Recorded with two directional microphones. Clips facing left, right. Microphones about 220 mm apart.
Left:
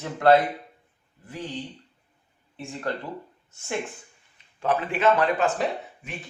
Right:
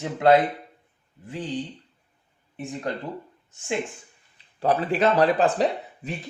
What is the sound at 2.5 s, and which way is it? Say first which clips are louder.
Speech: right 3 dB; 20° right (ahead or behind).